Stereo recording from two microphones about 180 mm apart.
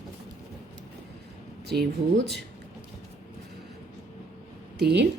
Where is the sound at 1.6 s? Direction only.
65° right (ahead or behind).